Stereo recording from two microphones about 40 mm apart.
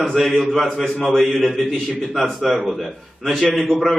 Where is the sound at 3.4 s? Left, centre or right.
Centre.